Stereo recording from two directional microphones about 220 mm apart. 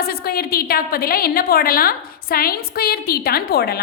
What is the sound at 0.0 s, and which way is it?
A woman's voice, 45° left (ahead or behind).